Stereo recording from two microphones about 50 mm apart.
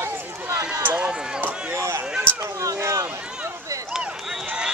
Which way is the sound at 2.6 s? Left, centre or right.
Right.